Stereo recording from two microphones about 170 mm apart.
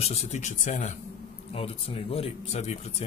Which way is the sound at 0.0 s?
40° left (ahead or behind).